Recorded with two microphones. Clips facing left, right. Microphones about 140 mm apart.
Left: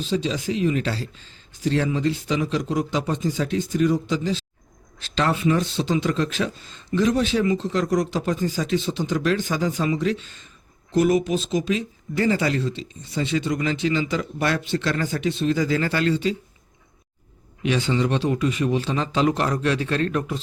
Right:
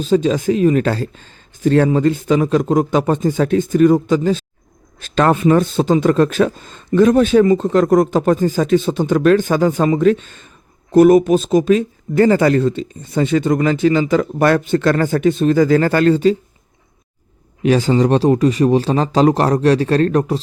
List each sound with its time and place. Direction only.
0.0 s speech: 50° right (ahead or behind)
17.6 s a man's voice: 40° right (ahead or behind)